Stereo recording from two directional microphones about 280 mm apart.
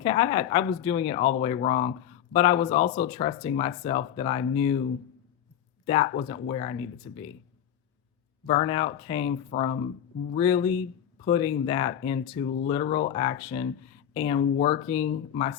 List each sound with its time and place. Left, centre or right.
0.0 s speech: centre
5.8 s speech: centre
8.4 s speech: left